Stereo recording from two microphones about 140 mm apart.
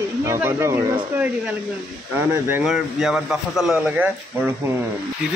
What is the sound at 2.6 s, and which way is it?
Speech, centre (ahead or behind).